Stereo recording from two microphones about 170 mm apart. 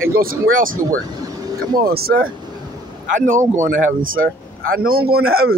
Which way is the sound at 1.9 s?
65° right (ahead or behind).